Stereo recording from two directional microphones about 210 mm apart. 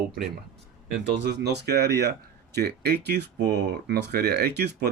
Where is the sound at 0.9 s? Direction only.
50° right (ahead or behind).